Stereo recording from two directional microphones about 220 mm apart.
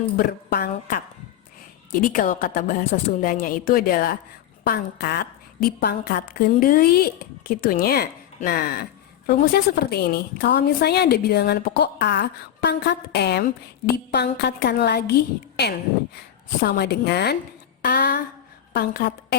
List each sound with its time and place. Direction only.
0.2 s a woman's voice: 45° left (ahead or behind)
16.1 s a woman's voice: 45° left (ahead or behind)